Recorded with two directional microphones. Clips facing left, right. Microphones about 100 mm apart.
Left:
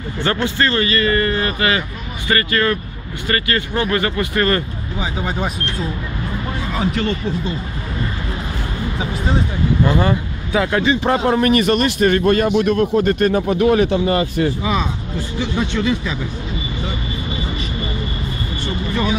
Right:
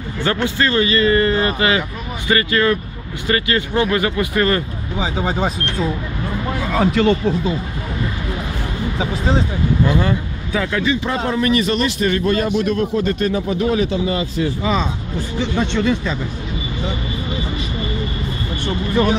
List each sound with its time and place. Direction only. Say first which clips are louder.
0.2 s a man's voice: even; 5° right (ahead or behind)
4.9 s speech: right 3 dB; 30° right (ahead or behind)
6.6 s speech: right 5 dB; 55° right (ahead or behind); by 7.5 s 90° right
9.9 s speech: left 1 dB; 20° left (ahead or behind)
10.9 s a man's voice: left 4 dB; 55° left (ahead or behind)
14.6 s speech: right 1 dB; 10° left (ahead or behind)